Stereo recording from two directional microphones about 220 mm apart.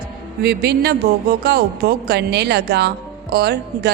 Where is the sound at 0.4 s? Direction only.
50° right (ahead or behind).